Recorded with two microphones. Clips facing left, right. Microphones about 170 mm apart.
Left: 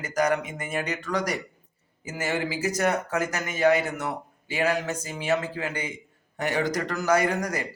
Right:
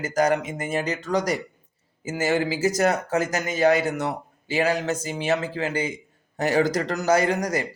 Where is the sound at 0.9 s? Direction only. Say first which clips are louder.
Right 4 dB; centre (ahead or behind).